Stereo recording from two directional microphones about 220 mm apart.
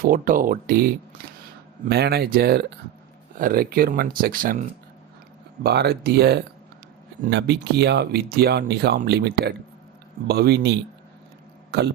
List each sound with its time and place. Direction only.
0.0 s speech: 40° right (ahead or behind)
5.6 s speech: 45° right (ahead or behind)